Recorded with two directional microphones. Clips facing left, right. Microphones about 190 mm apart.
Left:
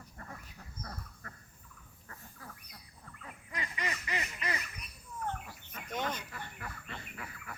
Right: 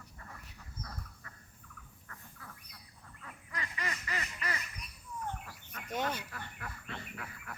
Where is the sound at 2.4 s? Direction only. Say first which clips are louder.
Left 3 dB; 40° left (ahead or behind).